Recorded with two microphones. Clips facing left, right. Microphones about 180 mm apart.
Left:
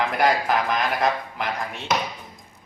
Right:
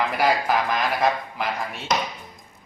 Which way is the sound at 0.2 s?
Centre (ahead or behind).